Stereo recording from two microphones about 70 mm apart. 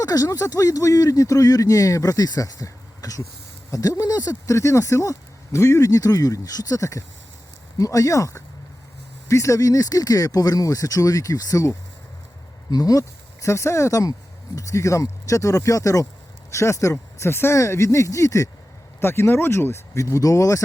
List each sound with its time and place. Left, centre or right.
0.0 s speech: left
12.7 s speech: left
18.9 s speech: left